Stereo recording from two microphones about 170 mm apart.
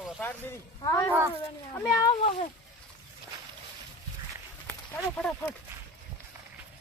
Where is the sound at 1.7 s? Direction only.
20° left (ahead or behind).